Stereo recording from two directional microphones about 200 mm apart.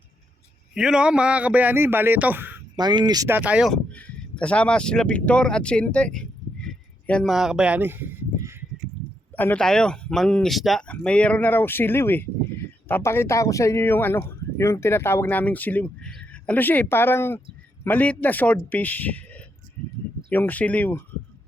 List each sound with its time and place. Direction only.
0.7 s a man's voice: 5° right (ahead or behind)
2.7 s speech: 20° right (ahead or behind)
9.3 s speech: 10° left (ahead or behind)